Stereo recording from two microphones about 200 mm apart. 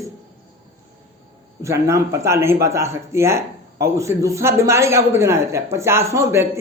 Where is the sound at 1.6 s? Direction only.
15° right (ahead or behind).